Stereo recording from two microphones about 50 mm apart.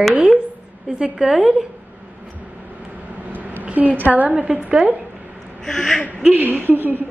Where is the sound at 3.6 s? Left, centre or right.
Right.